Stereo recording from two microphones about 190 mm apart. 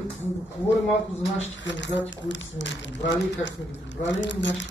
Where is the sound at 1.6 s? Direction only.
70° left (ahead or behind).